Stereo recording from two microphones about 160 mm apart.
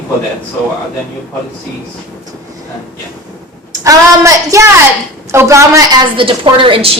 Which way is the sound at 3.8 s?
20° right (ahead or behind).